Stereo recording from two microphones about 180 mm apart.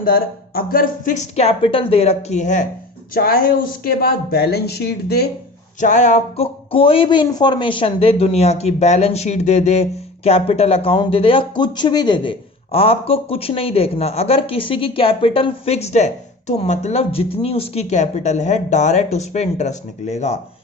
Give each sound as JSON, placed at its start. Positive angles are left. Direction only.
{"t": 0.0, "sound": "speech", "side_deg": 55}
{"t": 3.2, "sound": "speech", "side_deg": 55}
{"t": 5.8, "sound": "speech", "side_deg": 45}